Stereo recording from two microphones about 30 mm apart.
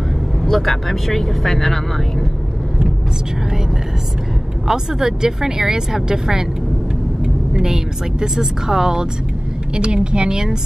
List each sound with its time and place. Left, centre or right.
0.4 s speech: centre
4.6 s speech: centre
7.5 s a woman's voice: right
10.1 s a woman's voice: right